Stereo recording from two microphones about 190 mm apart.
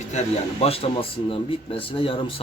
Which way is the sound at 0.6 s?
30° left (ahead or behind).